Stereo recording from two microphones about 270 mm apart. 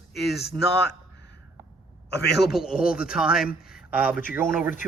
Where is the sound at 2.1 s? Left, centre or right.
Left.